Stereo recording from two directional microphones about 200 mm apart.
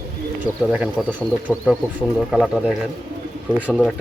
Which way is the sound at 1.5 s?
10° left (ahead or behind).